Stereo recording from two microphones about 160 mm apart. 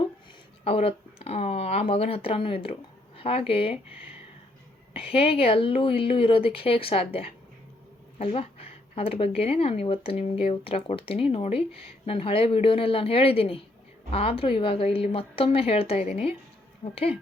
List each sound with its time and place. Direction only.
0.6 s speech: 40° left (ahead or behind)
4.9 s speech: 35° left (ahead or behind)